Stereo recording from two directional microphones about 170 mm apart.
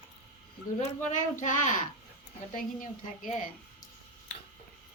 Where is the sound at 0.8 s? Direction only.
45° left (ahead or behind).